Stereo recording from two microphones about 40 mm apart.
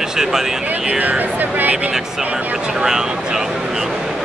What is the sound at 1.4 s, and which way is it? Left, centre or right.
Speech, right.